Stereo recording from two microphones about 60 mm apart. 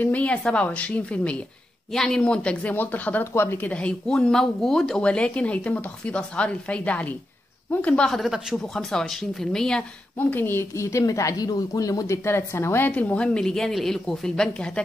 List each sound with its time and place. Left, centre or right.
0.0 s speech: left
1.9 s a woman's voice: centre
2.7 s speech: left
3.3 s a woman's voice: left
3.6 s speech: centre
4.1 s a woman's voice: centre
5.0 s speech: centre
8.1 s a woman's voice: centre
10.1 s speech: left
10.7 s speech: left
12.3 s a woman's voice: left
12.9 s speech: left
13.2 s a woman's voice: centre